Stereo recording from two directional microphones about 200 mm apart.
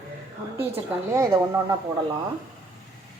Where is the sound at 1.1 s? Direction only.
15° right (ahead or behind).